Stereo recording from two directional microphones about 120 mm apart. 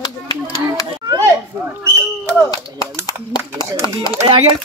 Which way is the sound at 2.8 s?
30° left (ahead or behind).